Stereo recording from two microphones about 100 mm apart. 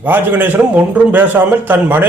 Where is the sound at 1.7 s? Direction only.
20° right (ahead or behind).